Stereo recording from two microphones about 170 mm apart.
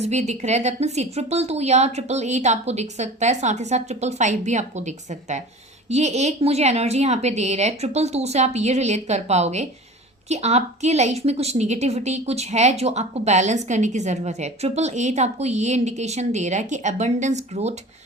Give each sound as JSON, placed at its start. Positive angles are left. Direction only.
{"t": 0.0, "sound": "a woman's voice", "side_deg": -40}